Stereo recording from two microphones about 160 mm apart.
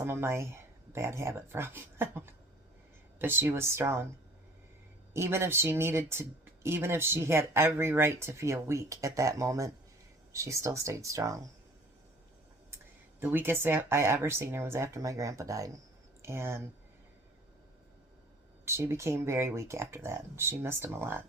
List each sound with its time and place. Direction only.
0.0 s speech: 15° right (ahead or behind)
5.1 s speech: 15° right (ahead or behind)
13.2 s speech: 15° right (ahead or behind)
18.6 s speech: 15° right (ahead or behind)